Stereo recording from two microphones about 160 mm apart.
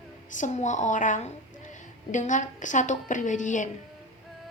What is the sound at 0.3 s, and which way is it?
A woman's voice, 50° left (ahead or behind).